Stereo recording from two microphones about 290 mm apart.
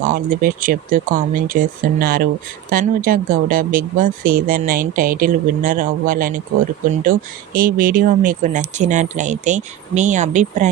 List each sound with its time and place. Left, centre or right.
0.0 s speech: right